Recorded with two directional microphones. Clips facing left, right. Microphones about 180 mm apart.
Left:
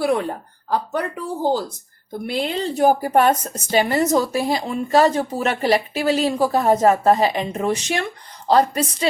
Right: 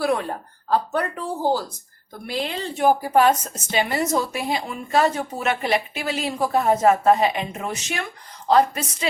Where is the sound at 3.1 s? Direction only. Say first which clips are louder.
Left 1 dB; 55° left (ahead or behind).